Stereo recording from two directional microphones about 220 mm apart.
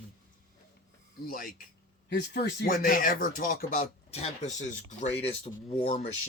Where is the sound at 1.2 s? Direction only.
40° left (ahead or behind).